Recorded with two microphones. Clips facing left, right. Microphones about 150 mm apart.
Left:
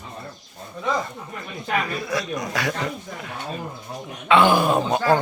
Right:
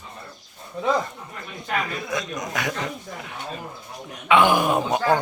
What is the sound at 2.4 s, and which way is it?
Speech, 20° right (ahead or behind).